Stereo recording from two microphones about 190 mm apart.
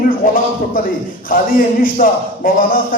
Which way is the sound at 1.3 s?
50° left (ahead or behind).